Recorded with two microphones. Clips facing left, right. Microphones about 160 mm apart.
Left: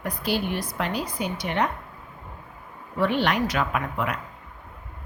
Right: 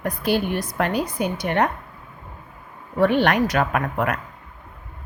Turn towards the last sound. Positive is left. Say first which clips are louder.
# right 4 dB
turn(degrees=-50)  # may be behind; listen again after turning